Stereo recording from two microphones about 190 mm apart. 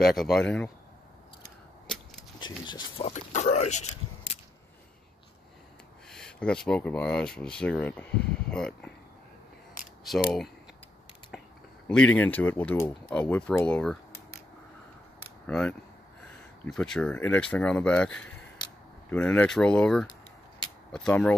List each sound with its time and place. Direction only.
0.0 s speech: centre (ahead or behind)
2.4 s speech: 25° left (ahead or behind)
3.1 s speech: 40° left (ahead or behind)
6.0 s speech: 5° left (ahead or behind)
11.3 s a sound: 5° right (ahead or behind)
11.9 s speech: 5° left (ahead or behind)
15.4 s speech: 5° left (ahead or behind)
20.1 s a sound: 25° left (ahead or behind)
20.9 s speech: 5° left (ahead or behind)